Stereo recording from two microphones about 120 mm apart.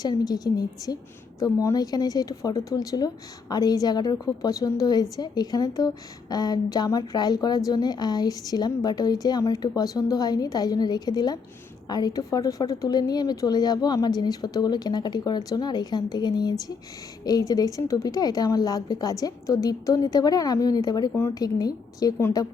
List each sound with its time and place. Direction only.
0.0 s a woman's voice: 35° left (ahead or behind)